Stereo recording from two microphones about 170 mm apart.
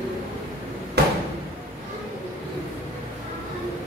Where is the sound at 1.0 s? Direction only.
75° right (ahead or behind).